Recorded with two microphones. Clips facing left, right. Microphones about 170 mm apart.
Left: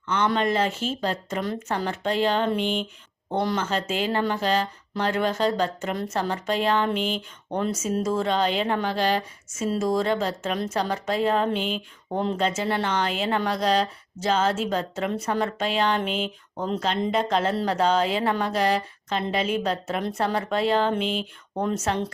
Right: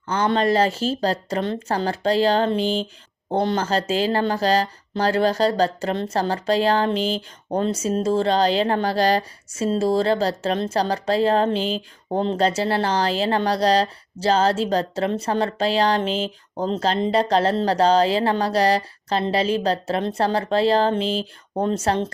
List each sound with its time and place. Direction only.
0.3 s speech: 35° right (ahead or behind)